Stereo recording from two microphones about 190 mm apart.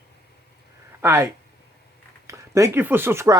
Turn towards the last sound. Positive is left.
turn(degrees=-15)  # may be behind; listen again after turning